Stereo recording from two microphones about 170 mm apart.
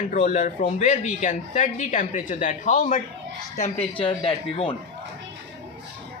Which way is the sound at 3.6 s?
30° left (ahead or behind).